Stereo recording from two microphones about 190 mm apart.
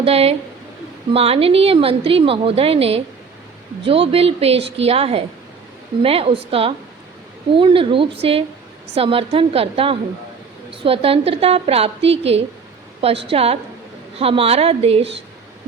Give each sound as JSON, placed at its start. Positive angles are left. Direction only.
{"t": 0.0, "sound": "a woman's voice", "side_deg": -30}
{"t": 13.3, "sound": "a woman's voice", "side_deg": -30}